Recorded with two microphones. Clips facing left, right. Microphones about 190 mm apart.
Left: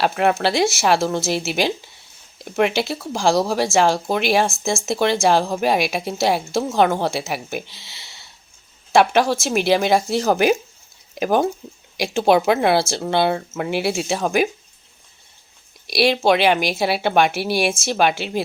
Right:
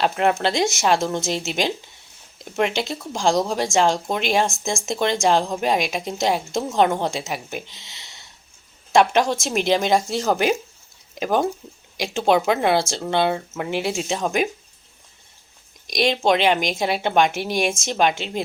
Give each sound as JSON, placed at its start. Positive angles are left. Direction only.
{"t": 0.0, "sound": "speech", "side_deg": 5}
{"t": 15.9, "sound": "speech", "side_deg": 5}